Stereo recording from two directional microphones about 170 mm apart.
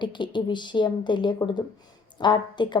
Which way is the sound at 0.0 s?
25° left (ahead or behind).